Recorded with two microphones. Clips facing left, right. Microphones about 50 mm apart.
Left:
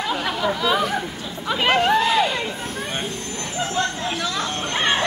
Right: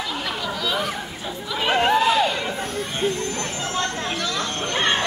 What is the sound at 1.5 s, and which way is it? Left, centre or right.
Chatter, left.